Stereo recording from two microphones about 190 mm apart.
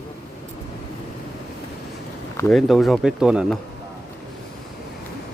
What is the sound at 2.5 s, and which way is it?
Speech, centre (ahead or behind).